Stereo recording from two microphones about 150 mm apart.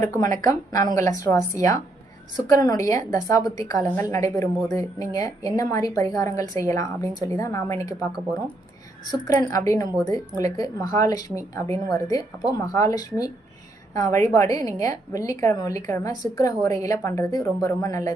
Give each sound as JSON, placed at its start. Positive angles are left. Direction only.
{"t": 0.4, "sound": "a woman's voice", "side_deg": 25}
{"t": 9.0, "sound": "a woman's voice", "side_deg": 25}